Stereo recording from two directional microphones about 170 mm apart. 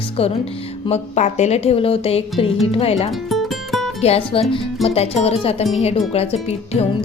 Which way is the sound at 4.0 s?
35° left (ahead or behind).